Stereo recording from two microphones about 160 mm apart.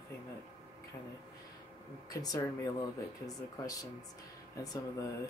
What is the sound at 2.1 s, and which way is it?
Speech, 20° left (ahead or behind).